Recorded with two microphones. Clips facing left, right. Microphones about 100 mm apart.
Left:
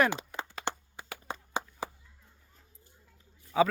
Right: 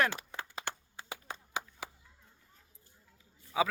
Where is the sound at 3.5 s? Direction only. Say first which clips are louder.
Left 5 dB; 5° right (ahead or behind).